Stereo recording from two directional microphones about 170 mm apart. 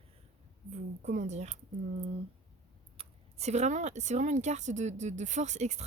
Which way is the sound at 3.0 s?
40° right (ahead or behind).